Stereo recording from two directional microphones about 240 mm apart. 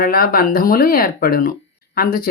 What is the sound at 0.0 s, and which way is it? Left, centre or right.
Speech, left.